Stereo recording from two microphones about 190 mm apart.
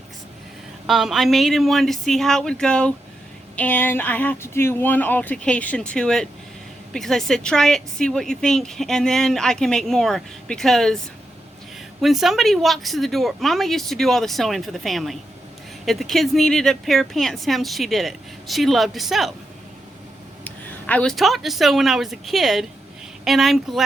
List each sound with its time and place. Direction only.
0.9 s speech: centre (ahead or behind)
12.0 s speech: centre (ahead or behind)
20.4 s speech: 10° left (ahead or behind)